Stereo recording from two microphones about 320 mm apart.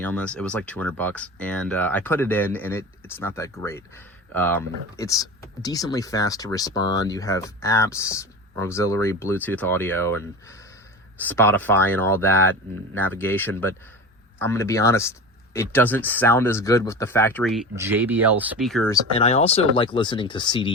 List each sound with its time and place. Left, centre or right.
0.0 s speech: centre
11.2 s speech: centre
19.1 s speech: centre